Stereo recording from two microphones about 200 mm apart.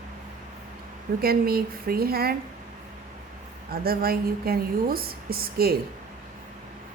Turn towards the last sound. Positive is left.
turn(degrees=-50)  # may be behind; listen again after turning